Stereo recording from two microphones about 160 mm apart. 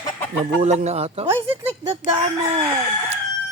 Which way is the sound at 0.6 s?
45° right (ahead or behind).